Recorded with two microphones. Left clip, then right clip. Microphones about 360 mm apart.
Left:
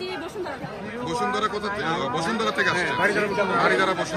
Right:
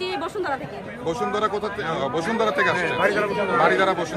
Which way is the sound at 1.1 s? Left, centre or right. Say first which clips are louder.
Right 2 dB; centre.